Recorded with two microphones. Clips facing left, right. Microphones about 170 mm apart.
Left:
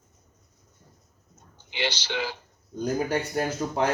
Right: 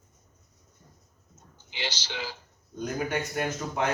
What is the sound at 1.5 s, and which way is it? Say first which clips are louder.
Speech: left 6 dB; 65° left (ahead or behind).